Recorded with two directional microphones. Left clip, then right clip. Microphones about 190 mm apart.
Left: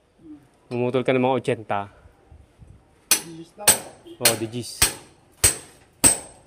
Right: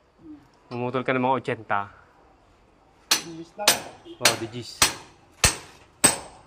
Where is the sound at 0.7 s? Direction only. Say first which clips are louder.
Left 4 dB; 65° left (ahead or behind).